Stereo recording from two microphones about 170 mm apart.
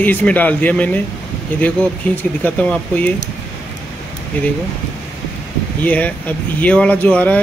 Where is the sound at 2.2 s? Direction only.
10° left (ahead or behind).